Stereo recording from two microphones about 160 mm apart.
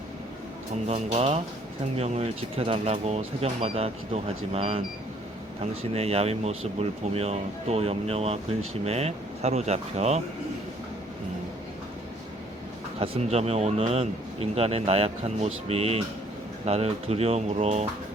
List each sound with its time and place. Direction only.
0.9 s speech: 40° right (ahead or behind)
5.9 s speech: 40° right (ahead or behind)
13.0 s speech: 40° right (ahead or behind)